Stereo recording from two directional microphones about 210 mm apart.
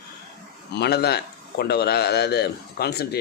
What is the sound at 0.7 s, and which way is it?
A man's voice, 50° left (ahead or behind).